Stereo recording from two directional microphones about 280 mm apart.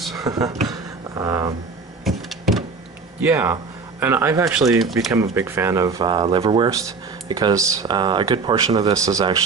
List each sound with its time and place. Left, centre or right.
0.1 s speech: centre
0.7 s a sound: centre
3.2 s speech: centre